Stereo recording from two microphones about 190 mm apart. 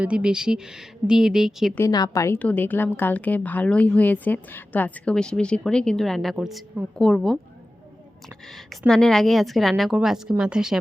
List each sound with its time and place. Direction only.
0.0 s a woman's voice: 5° right (ahead or behind)
1.8 s a woman's voice: 20° left (ahead or behind); by 7.3 s centre (ahead or behind)
8.7 s a woman's voice: centre (ahead or behind)